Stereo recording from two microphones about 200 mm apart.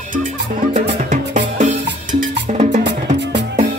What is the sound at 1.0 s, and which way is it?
Music, 40° right (ahead or behind).